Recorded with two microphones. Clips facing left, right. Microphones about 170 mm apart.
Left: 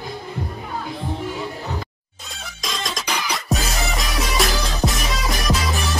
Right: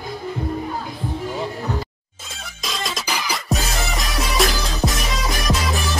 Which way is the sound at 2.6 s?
Centre (ahead or behind).